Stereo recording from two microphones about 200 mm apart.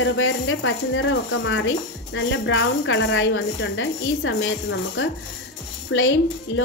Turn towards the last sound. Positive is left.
turn(degrees=80)